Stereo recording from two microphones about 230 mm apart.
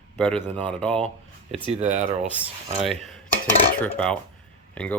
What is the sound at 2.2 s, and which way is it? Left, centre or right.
Speech, centre.